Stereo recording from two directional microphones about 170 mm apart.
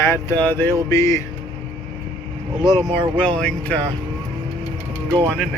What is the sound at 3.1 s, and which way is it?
Speech, 10° left (ahead or behind).